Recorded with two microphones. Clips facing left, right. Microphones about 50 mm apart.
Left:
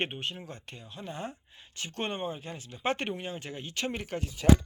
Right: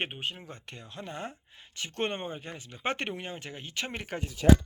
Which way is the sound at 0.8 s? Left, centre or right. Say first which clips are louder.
Right 2 dB; right.